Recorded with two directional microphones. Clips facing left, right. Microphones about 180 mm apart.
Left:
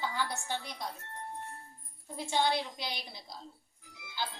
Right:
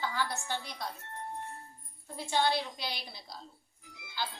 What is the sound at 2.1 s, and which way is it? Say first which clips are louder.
A woman's voice: even; 20° left (ahead or behind).